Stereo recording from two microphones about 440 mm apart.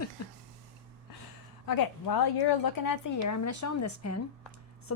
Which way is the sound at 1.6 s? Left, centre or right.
Left.